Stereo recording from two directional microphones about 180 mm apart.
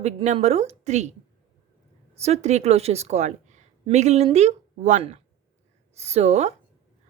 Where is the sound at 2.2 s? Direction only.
40° right (ahead or behind).